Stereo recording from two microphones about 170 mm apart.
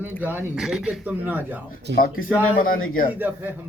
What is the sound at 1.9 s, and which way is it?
Speech, 90° right.